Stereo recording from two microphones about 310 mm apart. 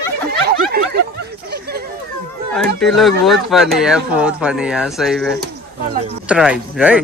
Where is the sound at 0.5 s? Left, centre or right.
Right.